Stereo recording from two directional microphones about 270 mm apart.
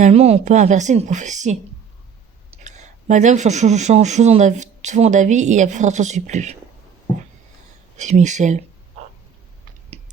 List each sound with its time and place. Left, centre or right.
0.0 s speech: right
2.6 s speech: right
7.9 s speech: right